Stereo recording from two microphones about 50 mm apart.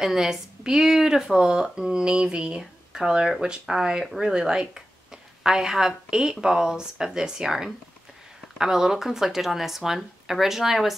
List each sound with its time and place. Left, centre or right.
0.0 s speech: centre